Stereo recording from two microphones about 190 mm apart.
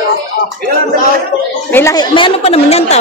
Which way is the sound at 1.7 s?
15° left (ahead or behind).